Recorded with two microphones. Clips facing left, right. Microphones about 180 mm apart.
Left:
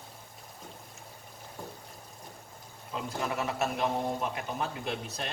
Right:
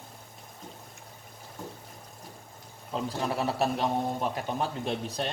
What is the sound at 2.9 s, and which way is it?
A man's voice, 35° right (ahead or behind).